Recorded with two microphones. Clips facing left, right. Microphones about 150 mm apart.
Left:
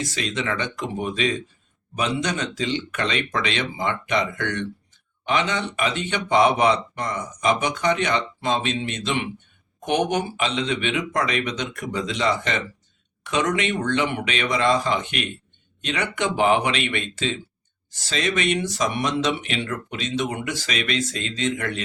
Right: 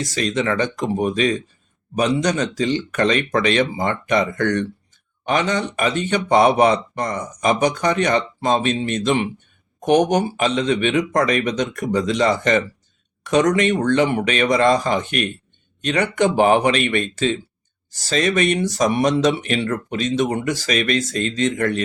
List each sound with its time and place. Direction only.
0.0 s speech: 40° right (ahead or behind)